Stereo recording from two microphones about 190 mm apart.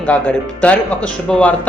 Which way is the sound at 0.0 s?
5° left (ahead or behind).